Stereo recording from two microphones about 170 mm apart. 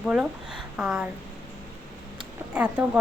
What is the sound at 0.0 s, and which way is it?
Speech, 5° right (ahead or behind).